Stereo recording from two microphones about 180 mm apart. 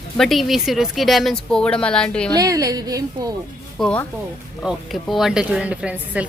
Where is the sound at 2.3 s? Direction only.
20° right (ahead or behind).